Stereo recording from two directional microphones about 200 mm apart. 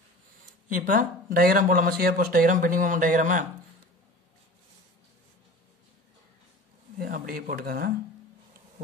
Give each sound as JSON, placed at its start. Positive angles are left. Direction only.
{"t": 0.7, "sound": "speech", "side_deg": -45}
{"t": 7.0, "sound": "speech", "side_deg": -45}